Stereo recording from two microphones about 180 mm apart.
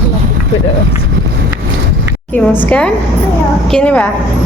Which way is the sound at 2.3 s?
10° left (ahead or behind).